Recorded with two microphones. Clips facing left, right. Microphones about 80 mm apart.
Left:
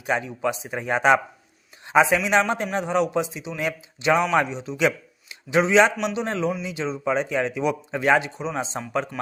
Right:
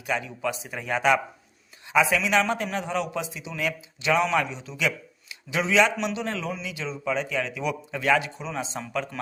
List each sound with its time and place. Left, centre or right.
0.0 s a man's voice: left